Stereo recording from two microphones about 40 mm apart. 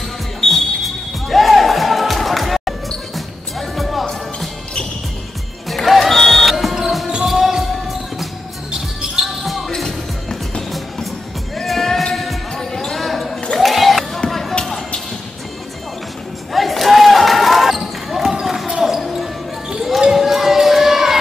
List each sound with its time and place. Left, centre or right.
0.4 s music: centre
5.7 s music: centre
6.5 s music: centre
7.2 s basketball bounce: centre
9.2 s basketball bounce: centre
11.5 s basketball bounce: centre
12.9 s basketball bounce: centre
13.6 s a sound: centre
16.5 s basketball bounce: centre
18.9 s basketball bounce: centre
20.1 s crowd: centre